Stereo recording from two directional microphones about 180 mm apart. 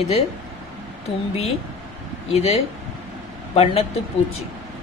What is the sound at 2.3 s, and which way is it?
Speech, 35° left (ahead or behind).